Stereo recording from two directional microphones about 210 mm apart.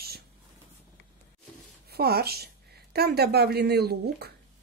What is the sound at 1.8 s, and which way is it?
A woman's voice, 50° right (ahead or behind).